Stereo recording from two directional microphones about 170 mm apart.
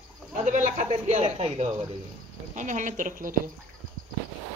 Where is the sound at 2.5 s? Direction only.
45° right (ahead or behind).